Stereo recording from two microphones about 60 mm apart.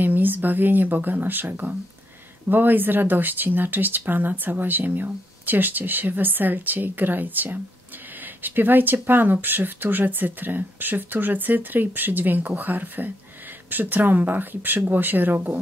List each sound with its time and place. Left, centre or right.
0.0 s speech: right